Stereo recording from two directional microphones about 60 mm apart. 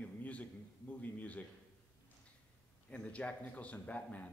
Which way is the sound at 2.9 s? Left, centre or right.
Centre.